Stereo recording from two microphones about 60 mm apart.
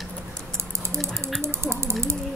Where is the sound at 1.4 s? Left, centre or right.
Right.